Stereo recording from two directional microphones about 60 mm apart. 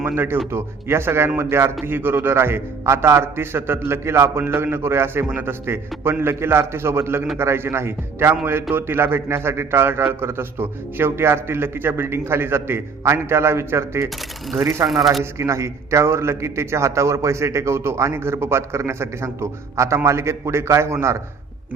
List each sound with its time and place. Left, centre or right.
0.0 s a man's voice: right
15.2 s a man's voice: right